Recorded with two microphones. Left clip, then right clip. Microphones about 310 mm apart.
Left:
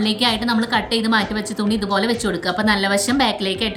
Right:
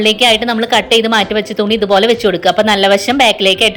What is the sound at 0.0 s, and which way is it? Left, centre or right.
A woman's voice, centre.